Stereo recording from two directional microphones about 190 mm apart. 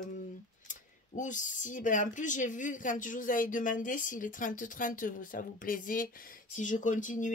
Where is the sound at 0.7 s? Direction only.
40° left (ahead or behind).